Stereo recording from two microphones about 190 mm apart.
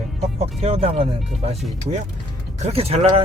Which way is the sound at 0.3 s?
30° right (ahead or behind).